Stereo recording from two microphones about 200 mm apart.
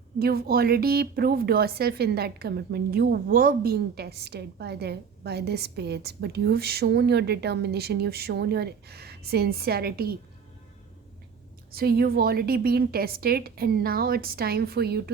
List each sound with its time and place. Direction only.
0.2 s speech: 50° right (ahead or behind)
11.7 s speech: 50° right (ahead or behind)